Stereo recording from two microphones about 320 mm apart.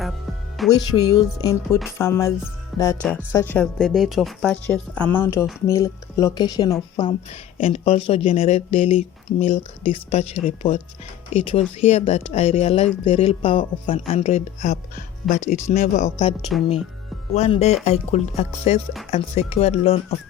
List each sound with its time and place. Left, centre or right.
0.6 s speech: centre
1.4 s speech: centre
16.5 s speech: centre
17.3 s speech: centre